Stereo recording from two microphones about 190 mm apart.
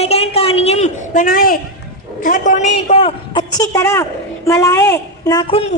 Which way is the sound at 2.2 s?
45° left (ahead or behind).